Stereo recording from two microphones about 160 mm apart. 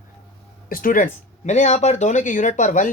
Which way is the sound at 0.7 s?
60° left (ahead or behind).